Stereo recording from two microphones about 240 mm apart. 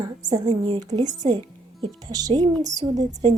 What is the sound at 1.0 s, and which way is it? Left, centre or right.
Speech, right.